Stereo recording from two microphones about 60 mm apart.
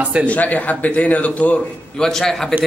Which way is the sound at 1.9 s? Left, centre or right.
Centre.